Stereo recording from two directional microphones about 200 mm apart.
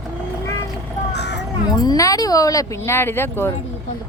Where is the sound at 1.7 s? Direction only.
20° left (ahead or behind).